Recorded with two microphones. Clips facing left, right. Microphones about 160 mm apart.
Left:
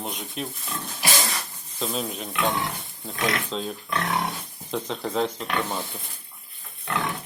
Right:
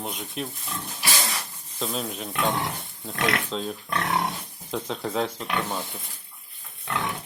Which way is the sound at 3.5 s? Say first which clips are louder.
Even; centre (ahead or behind).